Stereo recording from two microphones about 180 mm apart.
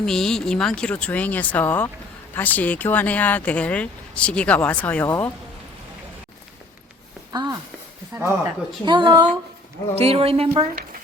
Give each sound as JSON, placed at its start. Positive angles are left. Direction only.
{"t": 0.0, "sound": "speech", "side_deg": 5}
{"t": 7.3, "sound": "speech", "side_deg": -20}
{"t": 8.8, "sound": "speech", "side_deg": -25}